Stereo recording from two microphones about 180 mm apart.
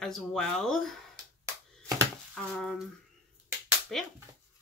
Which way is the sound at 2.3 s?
5° left (ahead or behind).